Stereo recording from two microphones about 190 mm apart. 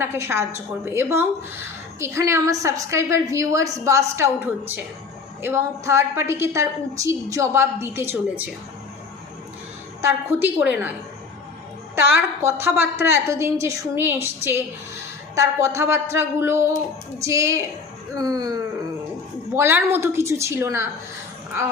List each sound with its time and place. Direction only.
0.0 s a woman's voice: 15° right (ahead or behind)
10.0 s a woman's voice: 10° right (ahead or behind)
11.9 s a woman's voice: 15° right (ahead or behind)